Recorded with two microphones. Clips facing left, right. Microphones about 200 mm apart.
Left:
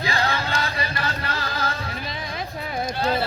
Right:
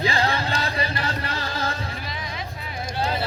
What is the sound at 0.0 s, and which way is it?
Chant, 30° right (ahead or behind).